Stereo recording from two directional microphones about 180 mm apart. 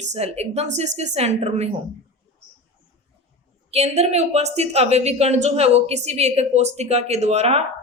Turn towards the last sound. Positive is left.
turn(degrees=-35)  # may be behind; listen again after turning